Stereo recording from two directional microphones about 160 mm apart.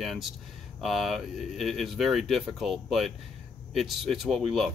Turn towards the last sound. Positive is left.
turn(degrees=0)  # may be behind; listen again after turning